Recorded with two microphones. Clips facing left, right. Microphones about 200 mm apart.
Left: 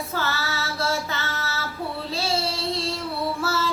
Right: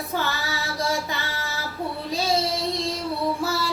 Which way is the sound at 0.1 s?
15° right (ahead or behind).